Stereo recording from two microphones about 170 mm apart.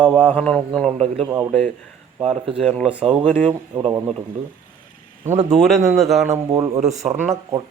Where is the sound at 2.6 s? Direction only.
Centre (ahead or behind).